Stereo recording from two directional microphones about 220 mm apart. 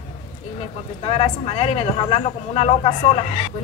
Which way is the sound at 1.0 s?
25° left (ahead or behind).